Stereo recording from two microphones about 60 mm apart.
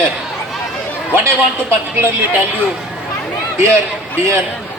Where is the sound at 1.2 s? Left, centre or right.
Right.